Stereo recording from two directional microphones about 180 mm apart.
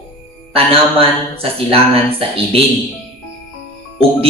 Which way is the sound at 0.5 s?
30° right (ahead or behind).